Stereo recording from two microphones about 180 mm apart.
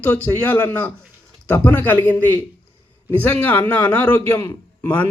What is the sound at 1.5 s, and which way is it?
Speech, 10° left (ahead or behind).